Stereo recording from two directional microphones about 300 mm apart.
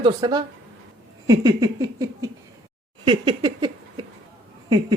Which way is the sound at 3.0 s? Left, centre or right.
Centre.